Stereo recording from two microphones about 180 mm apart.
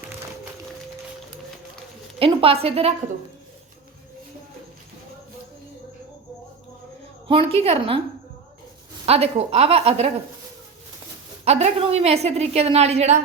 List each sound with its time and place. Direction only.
2.1 s a woman's voice: 30° right (ahead or behind)
7.3 s a woman's voice: 30° right (ahead or behind)
9.0 s a woman's voice: 35° right (ahead or behind)
11.4 s a woman's voice: 35° right (ahead or behind)